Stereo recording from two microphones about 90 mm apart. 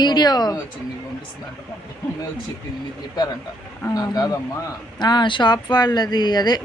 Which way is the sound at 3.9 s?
50° left (ahead or behind).